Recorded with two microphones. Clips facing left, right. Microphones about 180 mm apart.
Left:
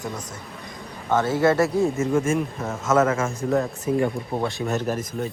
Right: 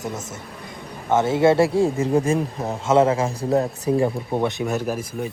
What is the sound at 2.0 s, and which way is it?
A man's voice, 35° right (ahead or behind).